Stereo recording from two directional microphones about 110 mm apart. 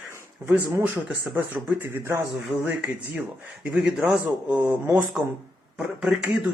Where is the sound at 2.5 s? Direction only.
10° right (ahead or behind).